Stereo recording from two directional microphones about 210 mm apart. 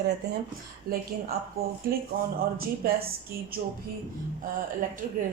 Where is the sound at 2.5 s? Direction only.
45° right (ahead or behind).